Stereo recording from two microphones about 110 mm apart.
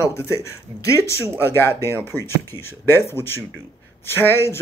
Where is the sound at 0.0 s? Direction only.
25° left (ahead or behind).